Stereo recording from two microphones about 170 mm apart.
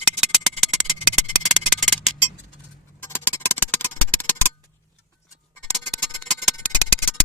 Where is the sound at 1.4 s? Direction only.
Centre (ahead or behind).